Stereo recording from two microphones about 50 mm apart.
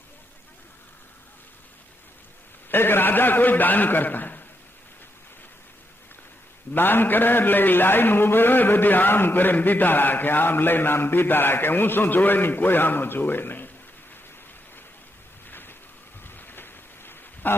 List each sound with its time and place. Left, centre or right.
2.6 s a man's voice: left
6.7 s a man's voice: left
15.4 s rain: left
16.2 s a sound: left